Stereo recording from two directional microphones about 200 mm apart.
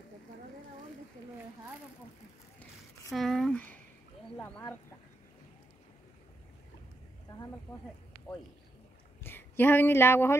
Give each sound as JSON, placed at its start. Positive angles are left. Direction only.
{"t": 3.1, "sound": "speech", "side_deg": 0}
{"t": 7.7, "sound": "speech", "side_deg": 25}
{"t": 9.2, "sound": "a woman's voice", "side_deg": 10}